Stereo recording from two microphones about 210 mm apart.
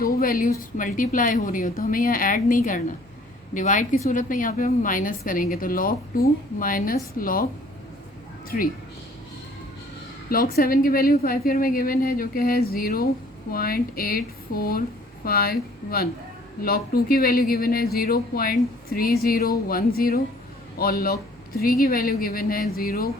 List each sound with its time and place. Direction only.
0.0 s a woman's voice: 45° left (ahead or behind)
8.4 s a woman's voice: 40° left (ahead or behind)
10.2 s speech: 45° left (ahead or behind)